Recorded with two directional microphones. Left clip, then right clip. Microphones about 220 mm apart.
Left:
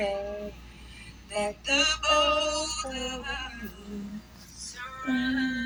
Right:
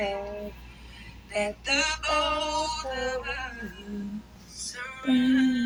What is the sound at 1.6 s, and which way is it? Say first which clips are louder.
Music: left 4 dB; centre (ahead or behind).